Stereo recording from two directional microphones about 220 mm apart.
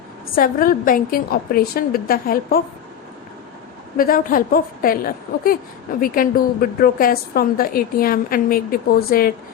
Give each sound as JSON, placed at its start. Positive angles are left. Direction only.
{"t": 0.3, "sound": "a woman's voice", "side_deg": 40}
{"t": 3.9, "sound": "a woman's voice", "side_deg": 40}